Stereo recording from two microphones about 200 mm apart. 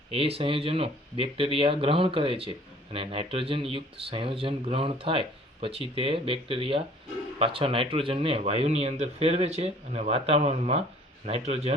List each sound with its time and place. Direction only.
0.1 s speech: 30° right (ahead or behind)